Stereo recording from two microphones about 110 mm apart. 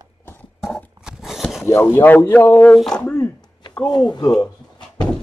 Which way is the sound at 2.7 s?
5° left (ahead or behind).